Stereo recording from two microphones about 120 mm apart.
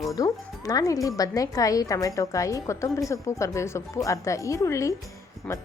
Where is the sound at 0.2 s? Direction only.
30° left (ahead or behind).